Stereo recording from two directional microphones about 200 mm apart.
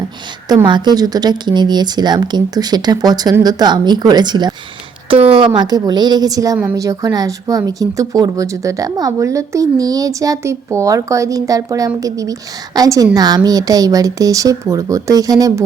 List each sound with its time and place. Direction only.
0.4 s a woman's voice: 20° right (ahead or behind)